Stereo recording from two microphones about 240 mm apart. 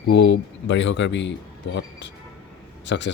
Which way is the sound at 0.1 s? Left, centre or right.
Left.